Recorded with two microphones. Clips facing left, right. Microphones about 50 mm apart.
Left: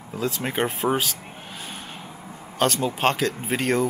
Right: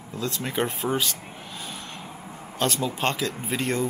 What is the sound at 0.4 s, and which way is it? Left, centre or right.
Speech, centre.